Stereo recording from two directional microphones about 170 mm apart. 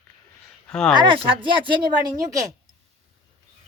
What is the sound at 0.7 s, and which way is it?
Speech, 5° left (ahead or behind).